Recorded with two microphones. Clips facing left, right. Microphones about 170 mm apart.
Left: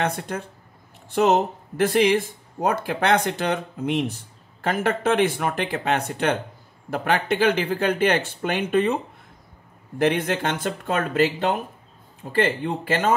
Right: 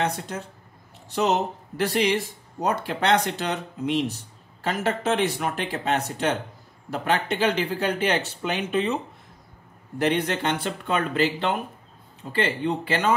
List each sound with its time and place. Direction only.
0.0 s speech: 55° left (ahead or behind)
12.3 s speech: 50° left (ahead or behind)